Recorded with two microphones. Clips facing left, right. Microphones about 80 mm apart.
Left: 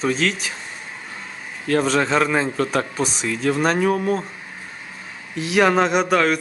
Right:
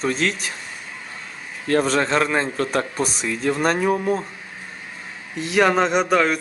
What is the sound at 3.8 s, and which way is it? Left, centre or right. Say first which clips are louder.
Speech: left 1 dB; centre.